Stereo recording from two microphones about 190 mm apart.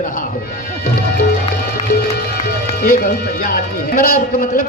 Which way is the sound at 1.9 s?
55° left (ahead or behind).